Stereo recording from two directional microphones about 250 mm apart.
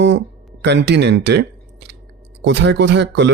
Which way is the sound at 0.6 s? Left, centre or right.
Right.